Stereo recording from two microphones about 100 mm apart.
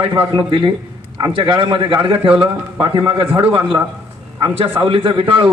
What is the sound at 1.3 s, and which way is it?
A man's voice, 60° right (ahead or behind).